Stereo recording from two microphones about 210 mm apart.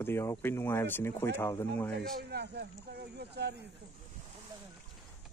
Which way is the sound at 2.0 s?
50° right (ahead or behind).